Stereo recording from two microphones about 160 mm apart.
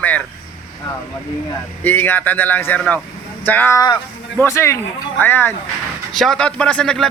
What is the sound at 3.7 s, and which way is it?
Speech, 25° left (ahead or behind).